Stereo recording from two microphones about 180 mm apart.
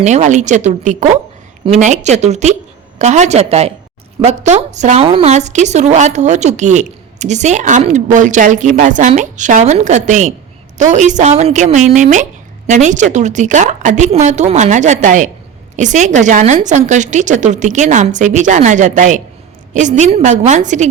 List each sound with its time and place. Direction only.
0.0 s a woman's voice: 40° right (ahead or behind)